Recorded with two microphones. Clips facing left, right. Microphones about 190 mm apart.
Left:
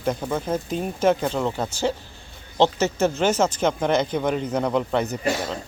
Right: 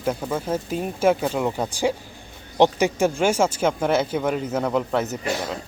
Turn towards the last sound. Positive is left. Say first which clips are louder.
# left 1 dB
turn(degrees=-5)  # may be behind; listen again after turning